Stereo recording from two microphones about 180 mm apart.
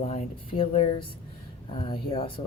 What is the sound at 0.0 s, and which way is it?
Speech, 35° left (ahead or behind).